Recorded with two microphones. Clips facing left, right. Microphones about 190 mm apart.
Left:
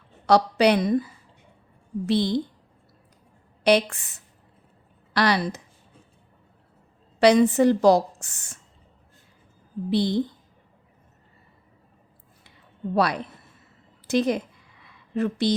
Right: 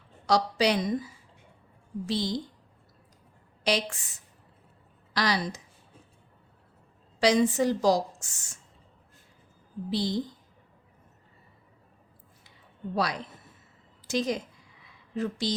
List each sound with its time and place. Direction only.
0.3 s a woman's voice: 60° left (ahead or behind)
3.6 s a woman's voice: 60° left (ahead or behind)
7.2 s a woman's voice: 60° left (ahead or behind)
9.9 s a woman's voice: 60° left (ahead or behind)
12.9 s a woman's voice: 60° left (ahead or behind)
14.1 s a sound: 60° left (ahead or behind)